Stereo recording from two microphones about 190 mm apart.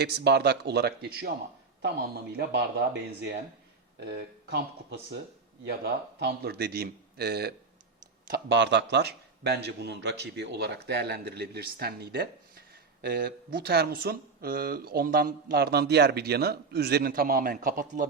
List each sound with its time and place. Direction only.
0.0 s a man's voice: 60° right (ahead or behind)
2.3 s a man's voice: 65° right (ahead or behind)
8.3 s a man's voice: 70° right (ahead or behind); by 18.1 s 45° right (ahead or behind)